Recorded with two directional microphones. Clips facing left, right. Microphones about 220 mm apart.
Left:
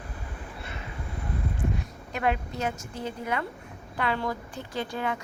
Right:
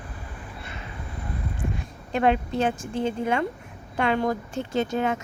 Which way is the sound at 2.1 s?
25° right (ahead or behind).